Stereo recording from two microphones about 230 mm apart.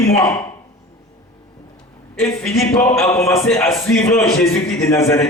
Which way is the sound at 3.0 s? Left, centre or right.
Centre.